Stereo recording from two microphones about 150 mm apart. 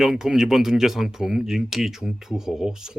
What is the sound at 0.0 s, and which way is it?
Speech, 5° right (ahead or behind).